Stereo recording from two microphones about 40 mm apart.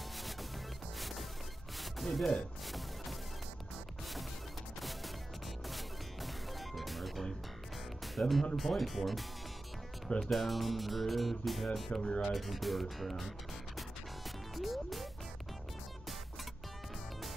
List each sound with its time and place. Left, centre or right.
0.9 s music: centre
5.7 s music: centre
8.2 s speech: centre
10.0 s speech: centre
10.3 s speech: centre
11.9 s speech: left
12.2 s speech: centre
13.7 s music: centre